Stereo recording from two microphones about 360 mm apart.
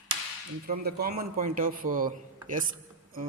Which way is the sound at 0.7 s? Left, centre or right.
Right.